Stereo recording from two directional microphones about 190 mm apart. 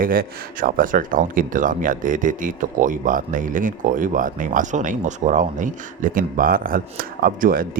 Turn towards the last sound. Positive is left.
turn(degrees=-50)  # may be behind; listen again after turning